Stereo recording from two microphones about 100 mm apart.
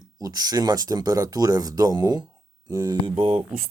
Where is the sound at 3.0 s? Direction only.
65° right (ahead or behind).